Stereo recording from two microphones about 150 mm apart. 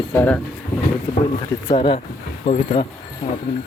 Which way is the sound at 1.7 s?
40° left (ahead or behind).